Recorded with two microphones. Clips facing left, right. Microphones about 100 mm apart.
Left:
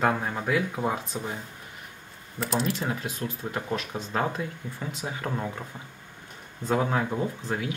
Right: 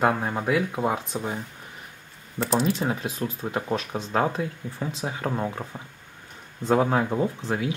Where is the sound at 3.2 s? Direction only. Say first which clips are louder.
Right 3 dB; 20° right (ahead or behind).